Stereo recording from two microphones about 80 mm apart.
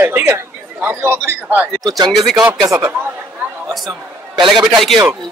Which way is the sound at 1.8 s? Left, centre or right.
Right.